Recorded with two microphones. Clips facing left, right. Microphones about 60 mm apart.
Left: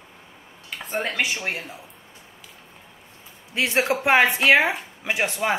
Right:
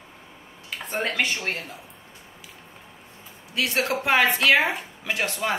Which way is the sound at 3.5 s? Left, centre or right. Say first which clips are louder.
Left 3 dB; left.